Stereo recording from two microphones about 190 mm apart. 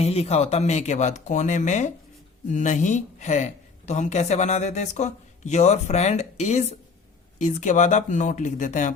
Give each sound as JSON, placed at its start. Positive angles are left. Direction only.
{"t": 0.0, "sound": "a woman's voice", "side_deg": 30}